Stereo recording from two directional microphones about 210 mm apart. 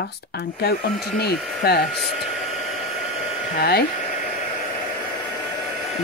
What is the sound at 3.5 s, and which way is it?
Speech, 50° left (ahead or behind).